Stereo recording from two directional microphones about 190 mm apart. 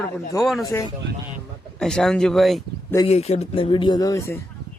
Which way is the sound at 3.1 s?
35° left (ahead or behind).